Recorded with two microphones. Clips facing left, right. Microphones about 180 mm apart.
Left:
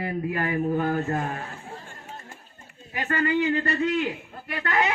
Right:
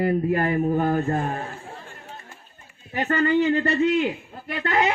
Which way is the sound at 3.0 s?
30° right (ahead or behind).